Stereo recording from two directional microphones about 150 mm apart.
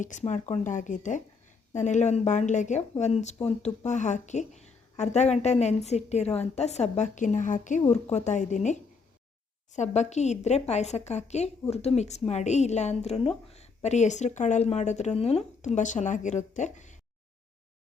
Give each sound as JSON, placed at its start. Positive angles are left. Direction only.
{"t": 0.0, "sound": "a woman's voice", "side_deg": 55}